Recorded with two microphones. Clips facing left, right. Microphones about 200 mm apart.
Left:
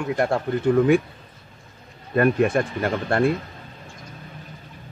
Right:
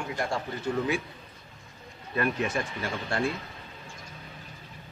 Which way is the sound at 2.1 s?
55° left (ahead or behind).